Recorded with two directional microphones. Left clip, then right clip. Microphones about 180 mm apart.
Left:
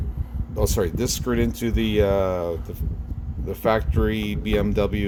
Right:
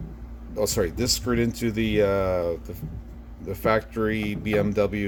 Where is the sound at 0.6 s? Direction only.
10° left (ahead or behind).